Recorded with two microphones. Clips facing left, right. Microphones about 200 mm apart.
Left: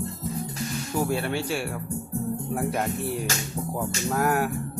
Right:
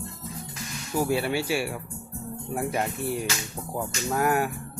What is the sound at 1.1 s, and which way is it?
Speech, 5° right (ahead or behind).